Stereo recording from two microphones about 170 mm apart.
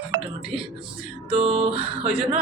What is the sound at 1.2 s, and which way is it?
Speech, 40° right (ahead or behind).